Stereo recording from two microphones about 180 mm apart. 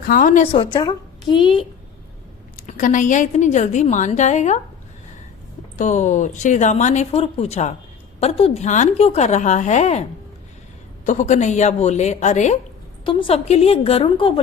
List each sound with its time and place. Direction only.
0.0 s a woman's voice: 50° left (ahead or behind)
0.5 s a woman's voice: 30° left (ahead or behind)
2.6 s speech: 45° left (ahead or behind)
5.7 s speech: 45° left (ahead or behind)
13.1 s speech: 30° left (ahead or behind)